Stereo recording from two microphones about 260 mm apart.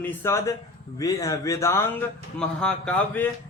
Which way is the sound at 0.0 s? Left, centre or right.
Centre.